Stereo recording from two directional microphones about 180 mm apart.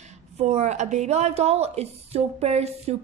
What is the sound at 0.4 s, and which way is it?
A woman's voice, 40° right (ahead or behind).